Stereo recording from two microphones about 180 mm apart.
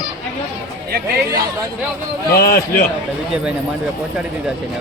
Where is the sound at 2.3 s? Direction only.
55° left (ahead or behind).